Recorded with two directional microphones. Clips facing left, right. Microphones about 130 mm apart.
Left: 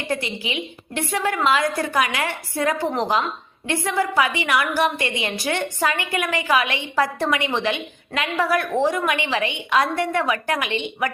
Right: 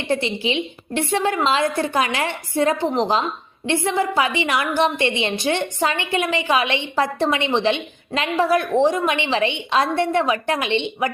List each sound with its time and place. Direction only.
0.1 s a woman's voice: 25° right (ahead or behind)